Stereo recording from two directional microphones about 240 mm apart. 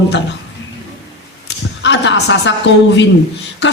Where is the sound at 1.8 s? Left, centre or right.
Left.